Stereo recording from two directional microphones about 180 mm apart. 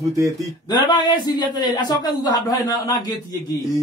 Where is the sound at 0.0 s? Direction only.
20° right (ahead or behind).